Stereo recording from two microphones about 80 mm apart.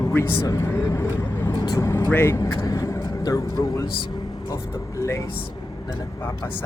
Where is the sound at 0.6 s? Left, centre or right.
Left.